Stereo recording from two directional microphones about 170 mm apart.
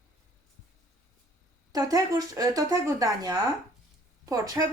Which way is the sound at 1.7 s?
20° right (ahead or behind).